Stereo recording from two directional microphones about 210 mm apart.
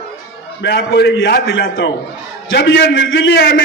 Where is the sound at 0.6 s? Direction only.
55° left (ahead or behind).